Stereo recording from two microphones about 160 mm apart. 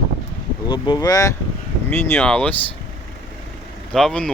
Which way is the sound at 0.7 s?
25° left (ahead or behind).